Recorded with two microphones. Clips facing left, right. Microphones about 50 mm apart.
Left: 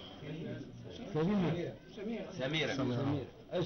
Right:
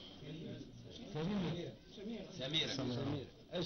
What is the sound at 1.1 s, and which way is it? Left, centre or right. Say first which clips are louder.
A man's voice: left 8 dB; left.